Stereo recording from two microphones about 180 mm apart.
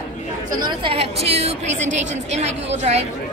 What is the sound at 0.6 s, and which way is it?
A woman's voice, 30° right (ahead or behind).